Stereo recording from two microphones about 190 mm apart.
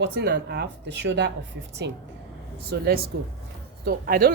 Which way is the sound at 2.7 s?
55° right (ahead or behind).